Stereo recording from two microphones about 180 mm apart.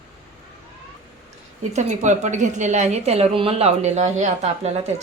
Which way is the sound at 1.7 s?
40° right (ahead or behind).